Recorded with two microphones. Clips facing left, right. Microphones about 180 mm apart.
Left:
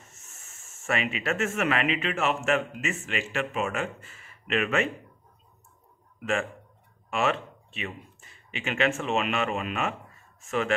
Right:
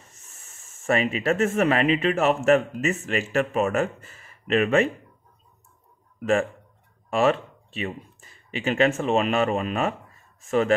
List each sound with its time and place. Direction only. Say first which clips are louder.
0.8 s a man's voice: right 6 dB; 35° right (ahead or behind)
7.1 s a man's voice: right 6 dB; 35° right (ahead or behind)